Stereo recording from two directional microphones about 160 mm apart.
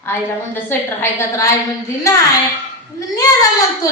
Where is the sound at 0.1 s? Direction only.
15° left (ahead or behind).